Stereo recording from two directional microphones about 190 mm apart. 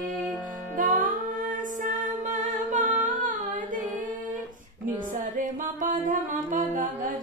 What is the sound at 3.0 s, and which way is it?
Humming, 45° right (ahead or behind).